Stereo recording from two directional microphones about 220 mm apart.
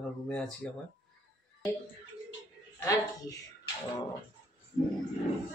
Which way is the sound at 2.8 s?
15° left (ahead or behind).